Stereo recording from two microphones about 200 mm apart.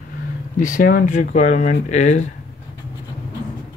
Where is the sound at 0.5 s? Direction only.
40° left (ahead or behind).